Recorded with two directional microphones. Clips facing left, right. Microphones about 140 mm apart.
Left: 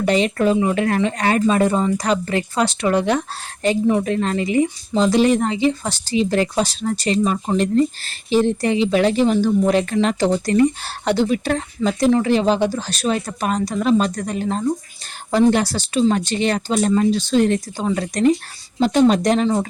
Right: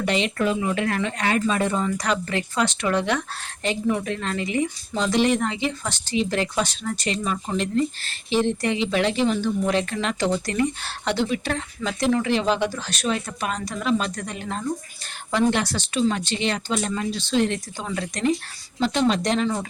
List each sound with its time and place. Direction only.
0.0 s speech: 40° left (ahead or behind)